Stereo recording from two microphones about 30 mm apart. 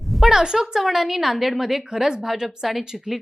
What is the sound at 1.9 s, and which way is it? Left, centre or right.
Speech, centre.